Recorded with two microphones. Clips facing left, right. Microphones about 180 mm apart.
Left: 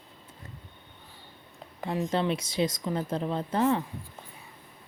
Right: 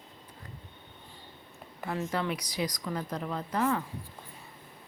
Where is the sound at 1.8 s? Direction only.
15° left (ahead or behind).